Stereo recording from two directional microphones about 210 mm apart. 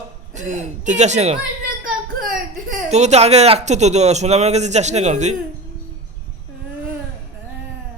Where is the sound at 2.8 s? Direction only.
30° right (ahead or behind).